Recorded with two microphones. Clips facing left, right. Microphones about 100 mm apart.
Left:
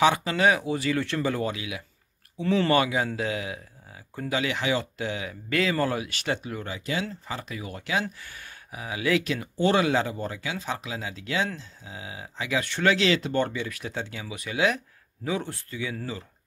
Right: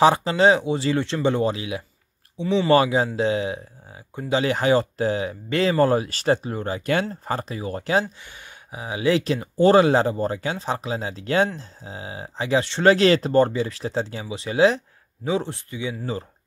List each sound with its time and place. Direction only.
0.0 s speech: 30° right (ahead or behind)
2.3 s speech: 20° right (ahead or behind)
2.7 s speech: 30° right (ahead or behind)
8.0 s speech: 20° right (ahead or behind)
12.9 s speech: 40° right (ahead or behind); by 16.1 s 20° right (ahead or behind)